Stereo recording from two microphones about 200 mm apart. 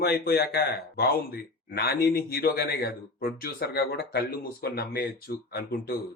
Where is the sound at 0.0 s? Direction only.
50° left (ahead or behind).